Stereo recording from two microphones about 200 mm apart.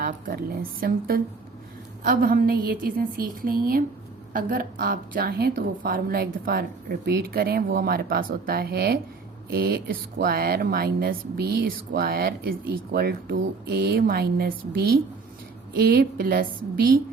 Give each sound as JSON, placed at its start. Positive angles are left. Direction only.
{"t": 0.0, "sound": "speech", "side_deg": -50}